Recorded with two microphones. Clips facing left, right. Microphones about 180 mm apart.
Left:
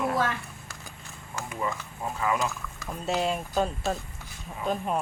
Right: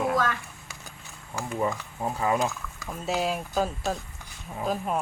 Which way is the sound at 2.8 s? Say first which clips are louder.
Even; centre (ahead or behind).